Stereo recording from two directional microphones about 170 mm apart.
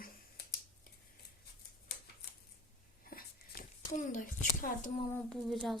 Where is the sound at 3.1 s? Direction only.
60° left (ahead or behind).